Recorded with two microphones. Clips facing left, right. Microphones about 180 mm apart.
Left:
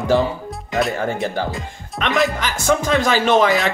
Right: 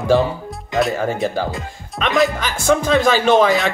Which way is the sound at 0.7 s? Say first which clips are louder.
Right 2 dB; centre (ahead or behind).